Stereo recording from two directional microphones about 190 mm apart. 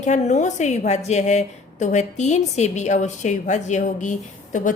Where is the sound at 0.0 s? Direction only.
40° left (ahead or behind).